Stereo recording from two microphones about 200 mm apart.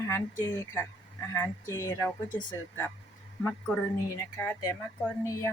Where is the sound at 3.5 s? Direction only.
5° left (ahead or behind).